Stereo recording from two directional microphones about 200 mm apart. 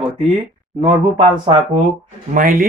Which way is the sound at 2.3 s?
45° right (ahead or behind).